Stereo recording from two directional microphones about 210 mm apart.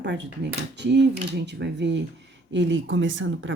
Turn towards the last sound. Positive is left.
turn(degrees=-65)  # may be behind; listen again after turning